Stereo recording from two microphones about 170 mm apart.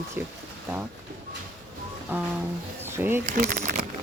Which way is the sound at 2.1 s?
10° right (ahead or behind).